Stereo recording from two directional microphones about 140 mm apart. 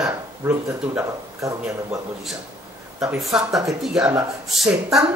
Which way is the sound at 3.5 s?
25° right (ahead or behind).